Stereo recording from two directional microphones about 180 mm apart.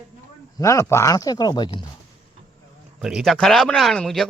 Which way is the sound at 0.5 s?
15° left (ahead or behind).